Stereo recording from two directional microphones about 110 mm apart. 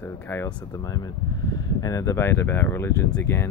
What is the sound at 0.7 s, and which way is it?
Speech, 35° left (ahead or behind).